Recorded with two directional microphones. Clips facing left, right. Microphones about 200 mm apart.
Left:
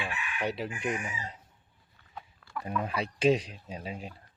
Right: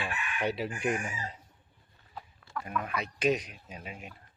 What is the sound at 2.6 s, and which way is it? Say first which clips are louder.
Speech: left 3 dB; 30° left (ahead or behind).